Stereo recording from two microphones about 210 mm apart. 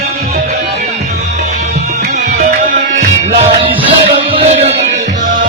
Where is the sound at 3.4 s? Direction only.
25° right (ahead or behind).